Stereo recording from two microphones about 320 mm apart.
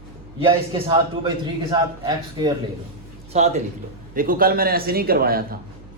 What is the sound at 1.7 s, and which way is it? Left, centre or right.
A man's voice, centre.